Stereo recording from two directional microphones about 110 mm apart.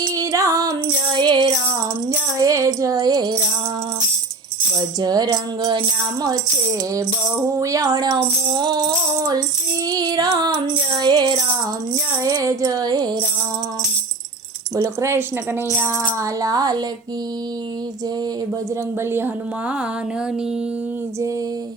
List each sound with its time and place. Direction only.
0.2 s music: 30° right (ahead or behind)
2.0 s music: 30° right (ahead or behind)
4.9 s music: 40° right (ahead or behind)
7.5 s music: 30° right (ahead or behind)
14.8 s a sound: 25° right (ahead or behind)
15.8 s music: 25° right (ahead or behind)
19.1 s a sound: 20° right (ahead or behind)